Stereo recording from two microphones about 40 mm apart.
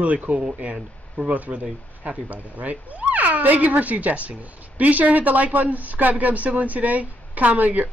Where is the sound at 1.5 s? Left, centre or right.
Right.